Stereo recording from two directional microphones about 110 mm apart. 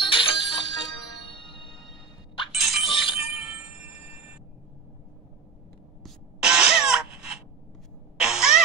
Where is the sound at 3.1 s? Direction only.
5° right (ahead or behind).